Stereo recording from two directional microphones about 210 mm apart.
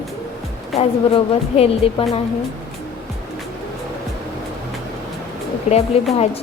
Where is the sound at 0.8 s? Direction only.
30° left (ahead or behind).